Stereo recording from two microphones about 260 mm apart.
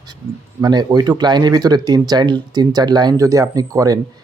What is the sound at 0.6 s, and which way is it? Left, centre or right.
Speech, centre.